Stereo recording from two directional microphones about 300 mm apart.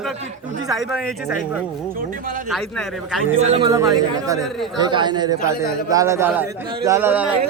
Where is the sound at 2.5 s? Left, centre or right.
Centre.